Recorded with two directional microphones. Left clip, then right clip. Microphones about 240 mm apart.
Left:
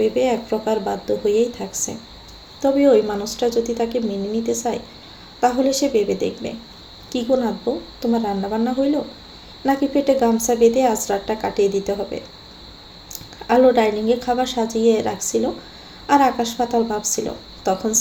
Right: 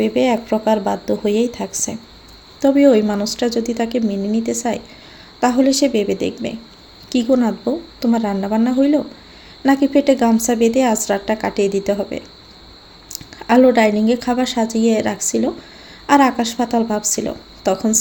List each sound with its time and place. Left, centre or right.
0.0 s a woman's voice: right